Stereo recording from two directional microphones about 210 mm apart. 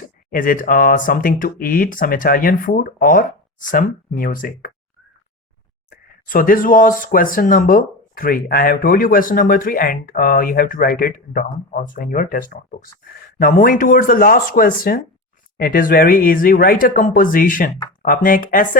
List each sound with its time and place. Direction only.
0.3 s speech: 40° left (ahead or behind)
5.9 s speech: 40° left (ahead or behind)